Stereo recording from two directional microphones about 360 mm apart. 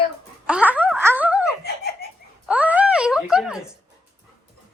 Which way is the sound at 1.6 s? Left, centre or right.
Left.